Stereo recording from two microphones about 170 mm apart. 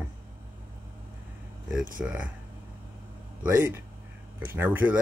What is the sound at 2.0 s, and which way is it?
Speech, 5° right (ahead or behind).